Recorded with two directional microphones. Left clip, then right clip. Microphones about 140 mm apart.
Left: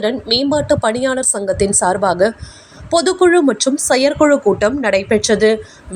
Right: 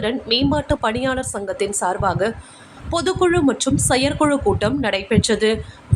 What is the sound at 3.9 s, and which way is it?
A woman's voice, 25° left (ahead or behind).